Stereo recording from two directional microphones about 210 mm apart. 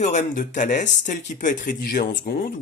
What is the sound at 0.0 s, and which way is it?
Speech, 35° left (ahead or behind).